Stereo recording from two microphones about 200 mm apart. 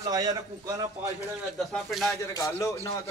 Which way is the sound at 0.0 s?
20° right (ahead or behind).